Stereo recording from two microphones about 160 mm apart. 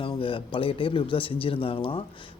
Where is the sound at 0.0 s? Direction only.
35° left (ahead or behind).